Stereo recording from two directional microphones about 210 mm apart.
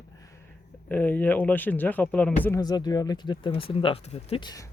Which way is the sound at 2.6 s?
20° left (ahead or behind).